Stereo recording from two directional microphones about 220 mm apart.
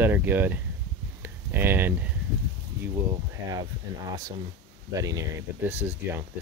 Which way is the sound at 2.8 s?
15° right (ahead or behind).